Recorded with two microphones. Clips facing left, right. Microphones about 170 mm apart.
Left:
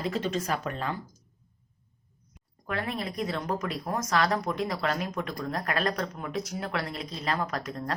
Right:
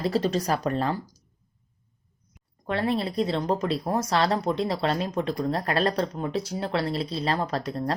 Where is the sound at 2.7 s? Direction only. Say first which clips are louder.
Right 6 dB; 30° right (ahead or behind).